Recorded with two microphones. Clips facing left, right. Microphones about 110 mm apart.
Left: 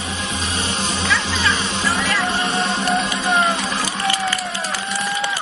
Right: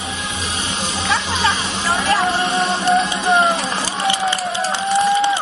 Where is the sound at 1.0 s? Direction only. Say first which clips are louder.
Right 3 dB; 35° right (ahead or behind).